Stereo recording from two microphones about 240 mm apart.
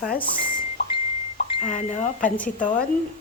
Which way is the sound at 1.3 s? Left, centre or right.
Left.